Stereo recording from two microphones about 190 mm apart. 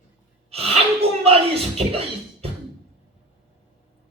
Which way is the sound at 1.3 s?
30° right (ahead or behind).